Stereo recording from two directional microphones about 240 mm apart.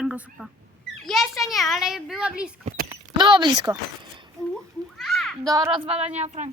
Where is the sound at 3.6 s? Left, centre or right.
Centre.